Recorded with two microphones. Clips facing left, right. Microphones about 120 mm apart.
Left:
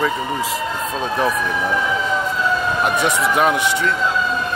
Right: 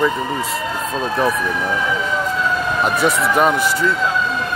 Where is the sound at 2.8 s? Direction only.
Centre (ahead or behind).